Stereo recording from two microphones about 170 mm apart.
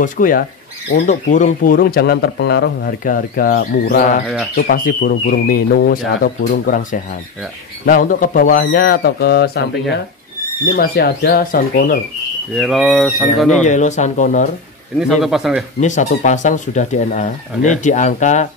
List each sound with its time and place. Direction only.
0.0 s speech: 55° left (ahead or behind); by 9.7 s 75° left (ahead or behind)
10.8 s speech: 65° left (ahead or behind)
12.5 s speech: centre (ahead or behind)
13.7 s speech: 45° left (ahead or behind)
15.0 s speech: centre (ahead or behind)
15.8 s speech: 45° left (ahead or behind)